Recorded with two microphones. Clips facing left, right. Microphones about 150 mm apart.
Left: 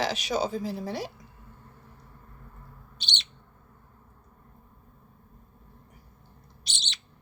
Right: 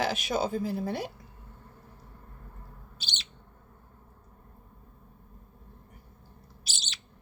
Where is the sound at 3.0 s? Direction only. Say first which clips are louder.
Left 4 dB; 5° right (ahead or behind).